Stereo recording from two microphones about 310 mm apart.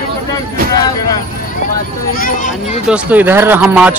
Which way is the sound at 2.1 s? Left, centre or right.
Left.